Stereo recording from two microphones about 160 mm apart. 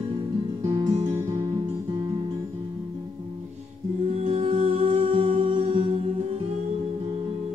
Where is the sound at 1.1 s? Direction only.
15° right (ahead or behind).